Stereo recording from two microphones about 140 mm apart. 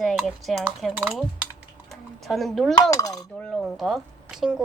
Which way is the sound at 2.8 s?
25° left (ahead or behind).